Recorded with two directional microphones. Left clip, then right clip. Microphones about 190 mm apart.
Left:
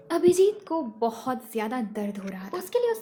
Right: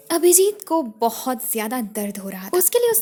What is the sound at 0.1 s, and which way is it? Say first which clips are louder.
A woman's voice: right 4 dB; 50° right (ahead or behind).